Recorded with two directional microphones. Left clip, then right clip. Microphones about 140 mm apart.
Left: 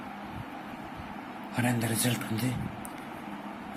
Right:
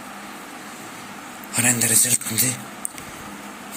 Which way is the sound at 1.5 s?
Centre (ahead or behind).